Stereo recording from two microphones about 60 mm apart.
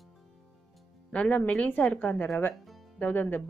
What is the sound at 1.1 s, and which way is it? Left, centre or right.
Speech, left.